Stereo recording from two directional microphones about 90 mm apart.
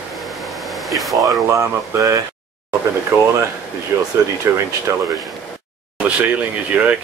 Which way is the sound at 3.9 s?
35° right (ahead or behind).